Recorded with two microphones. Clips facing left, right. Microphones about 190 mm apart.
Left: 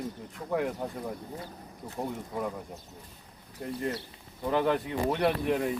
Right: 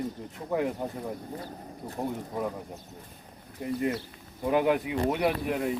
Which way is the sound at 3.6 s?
5° right (ahead or behind).